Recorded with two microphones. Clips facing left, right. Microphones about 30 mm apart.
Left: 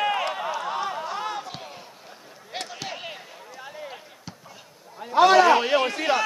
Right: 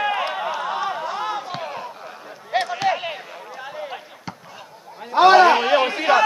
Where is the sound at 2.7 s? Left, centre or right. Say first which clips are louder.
Right 13 dB; centre.